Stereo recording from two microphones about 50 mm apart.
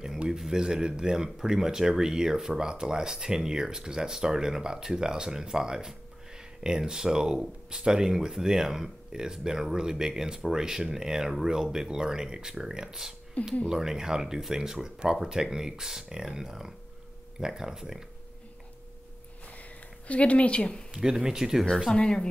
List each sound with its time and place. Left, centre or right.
0.4 s speech: centre
20.1 s speech: left
20.9 s speech: centre
21.9 s speech: centre